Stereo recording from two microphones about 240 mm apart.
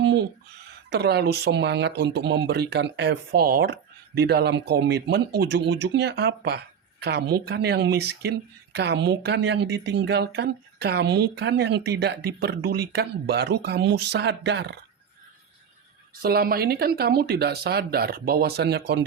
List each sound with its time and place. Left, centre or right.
0.9 s speech: right
16.2 s speech: right